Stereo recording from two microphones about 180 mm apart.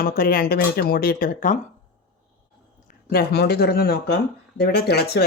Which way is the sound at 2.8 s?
60° left (ahead or behind).